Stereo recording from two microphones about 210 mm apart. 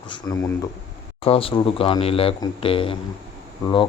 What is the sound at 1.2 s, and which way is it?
Speech, 25° left (ahead or behind).